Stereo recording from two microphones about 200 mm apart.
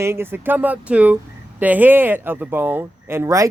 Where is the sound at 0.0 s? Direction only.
10° right (ahead or behind).